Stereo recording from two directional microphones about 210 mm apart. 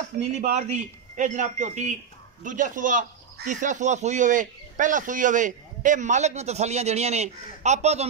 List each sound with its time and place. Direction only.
0.2 s speech: 30° right (ahead or behind)